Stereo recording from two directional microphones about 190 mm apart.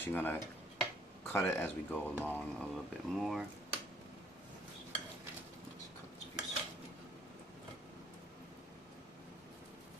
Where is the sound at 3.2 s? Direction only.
Centre (ahead or behind).